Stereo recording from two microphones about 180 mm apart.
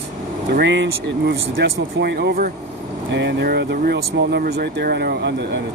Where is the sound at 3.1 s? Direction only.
75° right (ahead or behind).